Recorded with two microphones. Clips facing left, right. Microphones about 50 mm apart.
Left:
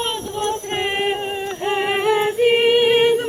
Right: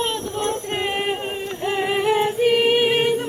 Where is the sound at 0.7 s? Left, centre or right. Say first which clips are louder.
Left 2 dB; left.